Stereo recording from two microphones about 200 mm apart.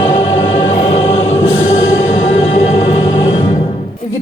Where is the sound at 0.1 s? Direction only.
30° left (ahead or behind).